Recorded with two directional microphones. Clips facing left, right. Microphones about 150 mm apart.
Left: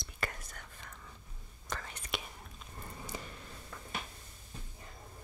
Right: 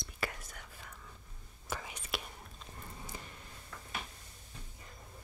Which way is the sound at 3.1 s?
90° left.